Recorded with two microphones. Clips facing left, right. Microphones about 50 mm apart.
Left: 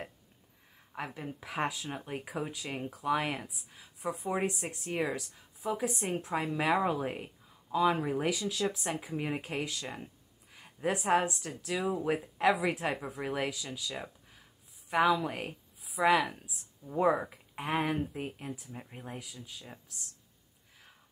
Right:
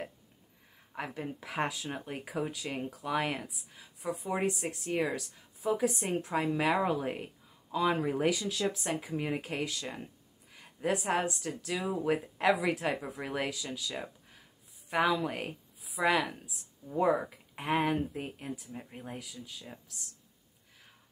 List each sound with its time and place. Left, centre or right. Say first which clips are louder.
0.9 s speech: right 1 dB; centre
10.5 s a sound: even; centre
11.0 s a woman's voice: left 3 dB; centre
16.8 s speech: even; centre
17.6 s speech: right 2 dB; centre